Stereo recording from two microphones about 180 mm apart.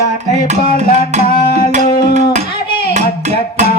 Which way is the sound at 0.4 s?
40° right (ahead or behind).